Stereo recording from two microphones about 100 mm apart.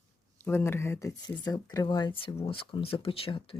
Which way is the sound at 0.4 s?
25° left (ahead or behind).